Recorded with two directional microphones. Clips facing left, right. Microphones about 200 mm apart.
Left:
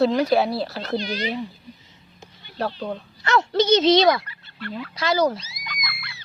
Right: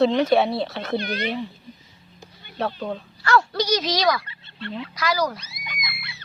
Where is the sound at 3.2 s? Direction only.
20° left (ahead or behind).